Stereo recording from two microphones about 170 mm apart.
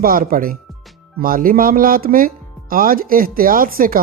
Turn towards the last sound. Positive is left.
turn(degrees=-55)  # may be behind; listen again after turning